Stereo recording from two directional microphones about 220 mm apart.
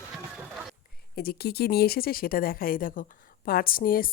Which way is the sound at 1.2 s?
45° left (ahead or behind).